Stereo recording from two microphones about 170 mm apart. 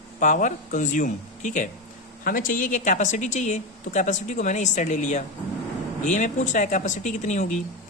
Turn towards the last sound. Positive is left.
turn(degrees=45)  # may be behind; listen again after turning